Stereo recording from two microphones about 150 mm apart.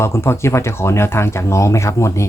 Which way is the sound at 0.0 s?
15° left (ahead or behind).